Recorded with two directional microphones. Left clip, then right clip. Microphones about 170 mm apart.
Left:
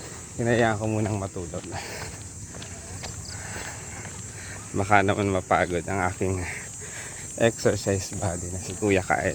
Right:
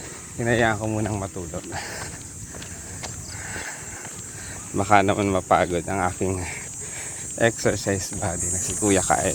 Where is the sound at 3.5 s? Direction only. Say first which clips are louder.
Right 4 dB; 25° left (ahead or behind).